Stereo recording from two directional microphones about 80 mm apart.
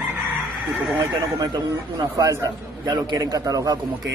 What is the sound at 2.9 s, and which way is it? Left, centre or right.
Speech, right.